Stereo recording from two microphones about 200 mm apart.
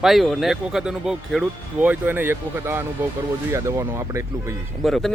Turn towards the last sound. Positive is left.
turn(degrees=0)  # may be behind; listen again after turning